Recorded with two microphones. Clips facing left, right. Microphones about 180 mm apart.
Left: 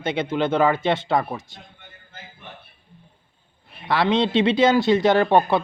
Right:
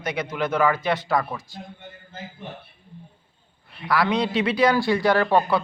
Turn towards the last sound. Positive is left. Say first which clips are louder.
# left 2 dB
turn(degrees=25)  # may be behind; listen again after turning